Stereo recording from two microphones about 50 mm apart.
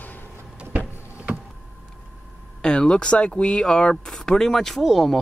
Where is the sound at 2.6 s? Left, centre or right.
Centre.